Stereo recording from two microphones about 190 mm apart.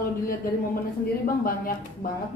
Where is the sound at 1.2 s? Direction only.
45° left (ahead or behind).